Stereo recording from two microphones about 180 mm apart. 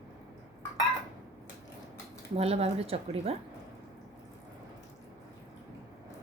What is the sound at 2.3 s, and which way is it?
Speech, 35° right (ahead or behind).